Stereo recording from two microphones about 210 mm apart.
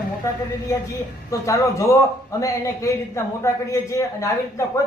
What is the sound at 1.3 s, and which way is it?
A man's voice, 15° left (ahead or behind).